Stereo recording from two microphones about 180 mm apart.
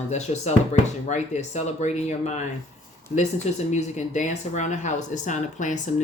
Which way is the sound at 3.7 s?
40° left (ahead or behind).